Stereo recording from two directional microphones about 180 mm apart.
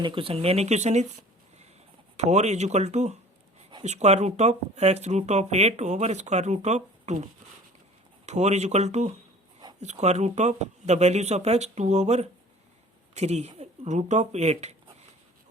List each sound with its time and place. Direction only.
0.0 s speech: 30° right (ahead or behind)
8.3 s speech: 40° right (ahead or behind)